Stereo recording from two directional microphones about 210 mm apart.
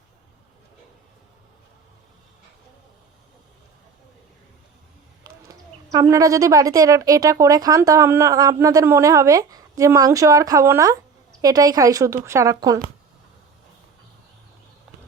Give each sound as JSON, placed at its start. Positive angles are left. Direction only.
{"t": 5.9, "sound": "a woman's voice", "side_deg": -15}